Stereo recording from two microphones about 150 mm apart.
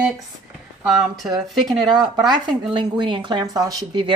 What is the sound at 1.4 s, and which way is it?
Speech, centre (ahead or behind).